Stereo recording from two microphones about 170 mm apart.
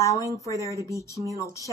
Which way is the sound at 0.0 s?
20° left (ahead or behind).